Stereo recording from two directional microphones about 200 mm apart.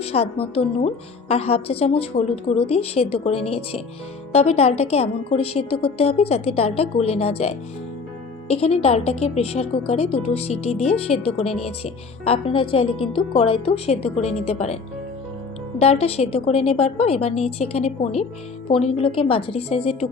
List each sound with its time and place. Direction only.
0.0 s a woman's voice: 30° left (ahead or behind)
15.8 s a woman's voice: 30° left (ahead or behind)